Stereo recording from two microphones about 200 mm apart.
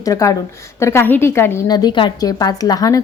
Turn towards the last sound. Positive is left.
turn(degrees=15)  # may be behind; listen again after turning